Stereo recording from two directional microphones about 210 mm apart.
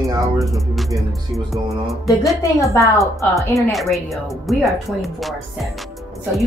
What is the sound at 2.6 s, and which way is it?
Speech, 15° left (ahead or behind).